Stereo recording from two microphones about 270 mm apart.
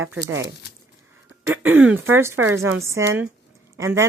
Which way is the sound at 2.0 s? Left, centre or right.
Centre.